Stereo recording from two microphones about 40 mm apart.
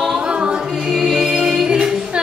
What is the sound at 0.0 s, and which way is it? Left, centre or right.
Music, right.